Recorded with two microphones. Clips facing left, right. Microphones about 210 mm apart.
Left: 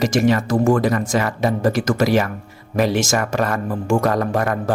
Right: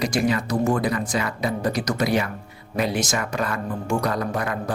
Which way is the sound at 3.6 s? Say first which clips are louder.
Left 6 dB; 85° left.